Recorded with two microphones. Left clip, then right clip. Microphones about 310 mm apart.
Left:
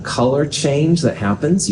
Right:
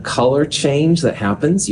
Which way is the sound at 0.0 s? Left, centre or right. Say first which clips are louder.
Right 2 dB; right.